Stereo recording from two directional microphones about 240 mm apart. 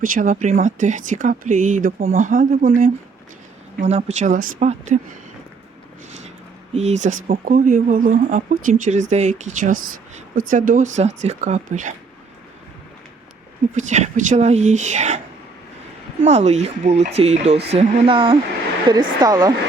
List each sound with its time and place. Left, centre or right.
0.0 s speech: right
6.7 s speech: right
13.7 s speech: right
16.2 s speech: right